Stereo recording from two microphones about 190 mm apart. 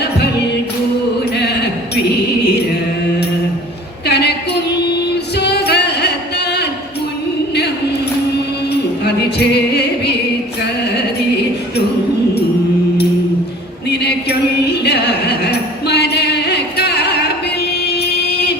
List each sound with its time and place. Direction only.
0.0 s a capella: 60° left (ahead or behind)
4.0 s a sound: 60° left (ahead or behind)
5.4 s music: 60° left (ahead or behind)
8.7 s music: 60° left (ahead or behind)
13.9 s a sound: 60° left (ahead or behind)
17.8 s music: 60° left (ahead or behind)